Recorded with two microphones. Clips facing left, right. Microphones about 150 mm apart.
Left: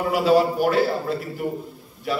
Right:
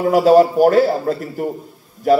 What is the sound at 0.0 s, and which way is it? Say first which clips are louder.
A man's voice: right 7 dB; 45° right (ahead or behind).